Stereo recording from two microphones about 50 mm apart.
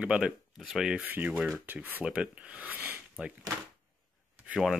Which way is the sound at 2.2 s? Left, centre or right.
Right.